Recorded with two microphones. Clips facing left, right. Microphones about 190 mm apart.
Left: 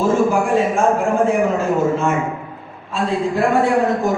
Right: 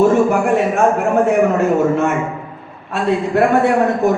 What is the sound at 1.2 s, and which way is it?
A man's voice, 65° right (ahead or behind).